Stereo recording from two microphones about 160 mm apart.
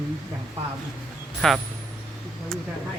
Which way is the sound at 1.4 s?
5° left (ahead or behind).